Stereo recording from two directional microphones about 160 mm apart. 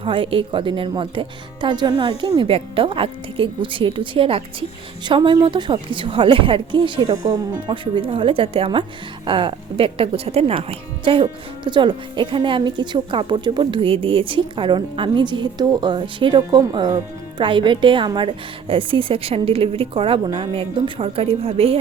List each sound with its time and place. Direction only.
0.0 s speech: 35° right (ahead or behind)